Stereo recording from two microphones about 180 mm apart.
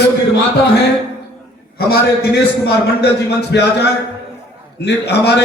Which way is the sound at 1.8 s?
65° left (ahead or behind).